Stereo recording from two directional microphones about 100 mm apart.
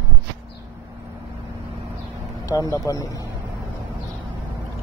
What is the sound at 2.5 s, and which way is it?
Speech, 35° left (ahead or behind).